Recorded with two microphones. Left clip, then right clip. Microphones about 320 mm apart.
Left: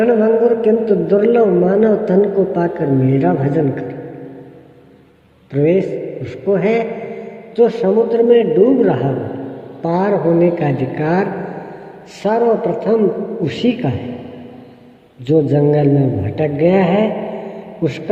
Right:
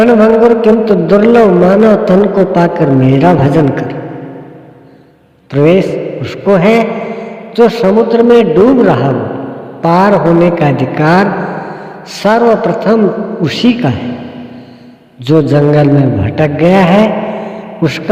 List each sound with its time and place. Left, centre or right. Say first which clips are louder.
0.0 s a man's voice: right 6 dB; right
5.5 s a man's voice: right 6 dB; right
15.3 s a man's voice: right 5 dB; right